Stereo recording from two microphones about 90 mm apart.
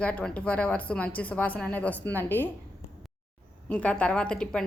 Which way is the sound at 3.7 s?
15° left (ahead or behind).